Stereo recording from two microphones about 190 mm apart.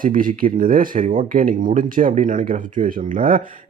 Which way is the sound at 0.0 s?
45° right (ahead or behind).